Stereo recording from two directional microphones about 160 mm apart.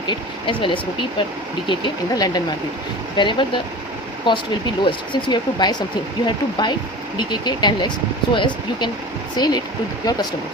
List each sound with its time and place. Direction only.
0.1 s speech: 30° left (ahead or behind)